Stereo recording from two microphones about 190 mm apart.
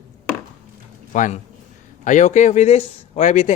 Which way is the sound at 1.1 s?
40° left (ahead or behind).